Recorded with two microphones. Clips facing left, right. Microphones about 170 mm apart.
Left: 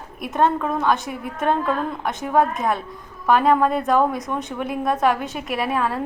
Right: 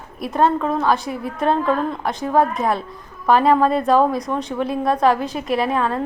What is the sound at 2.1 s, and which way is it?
A woman's voice, 5° left (ahead or behind).